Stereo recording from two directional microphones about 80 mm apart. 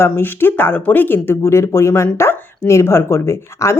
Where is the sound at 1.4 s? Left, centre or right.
Left.